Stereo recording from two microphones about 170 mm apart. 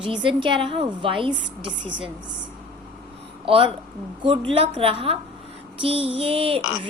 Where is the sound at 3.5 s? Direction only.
30° right (ahead or behind).